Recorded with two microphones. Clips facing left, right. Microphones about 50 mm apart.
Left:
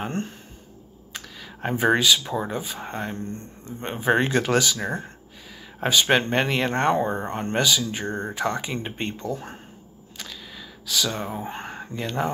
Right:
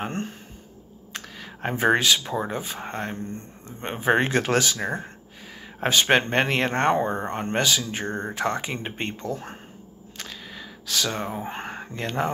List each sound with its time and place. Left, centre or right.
0.0 s speech: right
1.3 s a sound: right
2.0 s speech: right
2.2 s speech: right
5.8 s speech: right
10.1 s a sound: right
11.1 s speech: right
11.3 s a sound: right
11.9 s speech: right